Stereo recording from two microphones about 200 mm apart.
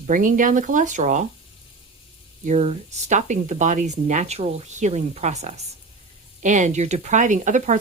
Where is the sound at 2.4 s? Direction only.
35° right (ahead or behind).